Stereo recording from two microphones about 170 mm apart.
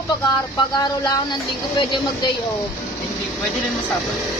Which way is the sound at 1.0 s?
25° left (ahead or behind).